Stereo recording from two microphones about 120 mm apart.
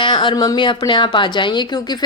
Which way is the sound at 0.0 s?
40° left (ahead or behind).